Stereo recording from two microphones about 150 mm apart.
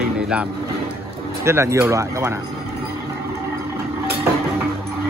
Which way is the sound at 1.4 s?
20° right (ahead or behind).